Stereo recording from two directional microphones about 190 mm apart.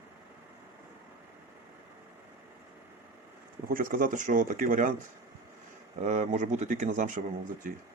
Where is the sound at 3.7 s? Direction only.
45° right (ahead or behind).